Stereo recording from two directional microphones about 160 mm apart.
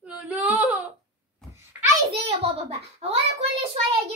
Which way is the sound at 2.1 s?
40° right (ahead or behind).